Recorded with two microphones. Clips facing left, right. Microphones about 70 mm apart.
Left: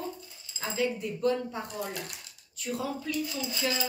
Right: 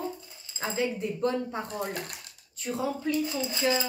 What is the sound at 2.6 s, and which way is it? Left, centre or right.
Speech, right.